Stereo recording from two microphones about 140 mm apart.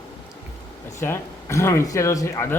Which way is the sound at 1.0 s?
20° left (ahead or behind).